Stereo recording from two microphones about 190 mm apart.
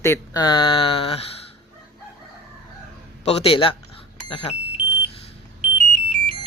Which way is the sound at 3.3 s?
30° left (ahead or behind).